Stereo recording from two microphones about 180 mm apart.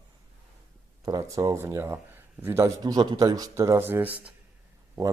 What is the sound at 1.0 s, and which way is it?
Speech, 20° right (ahead or behind).